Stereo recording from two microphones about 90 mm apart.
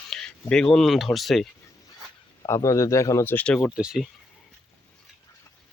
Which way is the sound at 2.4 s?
35° left (ahead or behind).